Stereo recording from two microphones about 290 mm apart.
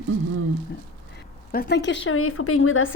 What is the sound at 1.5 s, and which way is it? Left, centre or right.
Speech, left.